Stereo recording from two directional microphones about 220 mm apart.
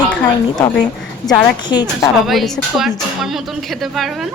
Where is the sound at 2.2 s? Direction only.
Centre (ahead or behind).